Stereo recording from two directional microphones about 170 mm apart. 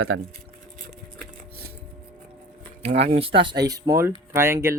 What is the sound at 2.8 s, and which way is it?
Speech, 40° right (ahead or behind).